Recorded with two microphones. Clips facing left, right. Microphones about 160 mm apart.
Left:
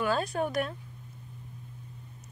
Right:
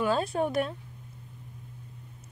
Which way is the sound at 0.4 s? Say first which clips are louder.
Right 2 dB; 30° right (ahead or behind).